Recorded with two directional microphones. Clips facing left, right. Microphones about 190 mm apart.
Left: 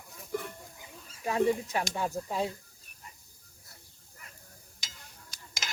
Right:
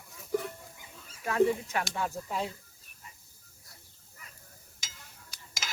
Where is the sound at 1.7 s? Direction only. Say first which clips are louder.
Left 1 dB; 20° left (ahead or behind).